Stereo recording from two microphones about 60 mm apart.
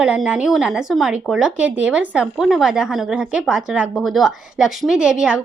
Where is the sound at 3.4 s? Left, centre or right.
Centre.